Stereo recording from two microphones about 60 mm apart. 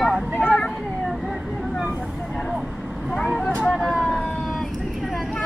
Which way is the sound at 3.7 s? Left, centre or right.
Centre.